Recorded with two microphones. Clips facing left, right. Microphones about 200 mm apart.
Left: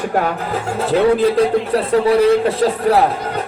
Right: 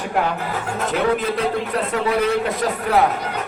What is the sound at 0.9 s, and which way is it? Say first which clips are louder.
Speech: left 7 dB; 35° left (ahead or behind).